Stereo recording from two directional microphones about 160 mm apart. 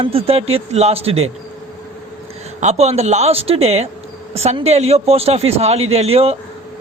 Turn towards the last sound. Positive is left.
turn(degrees=-40)  # may be behind; listen again after turning